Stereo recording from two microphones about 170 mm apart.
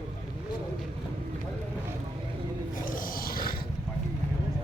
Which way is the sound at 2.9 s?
55° left (ahead or behind).